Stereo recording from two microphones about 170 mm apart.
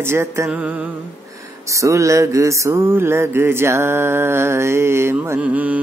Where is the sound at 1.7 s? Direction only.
20° right (ahead or behind).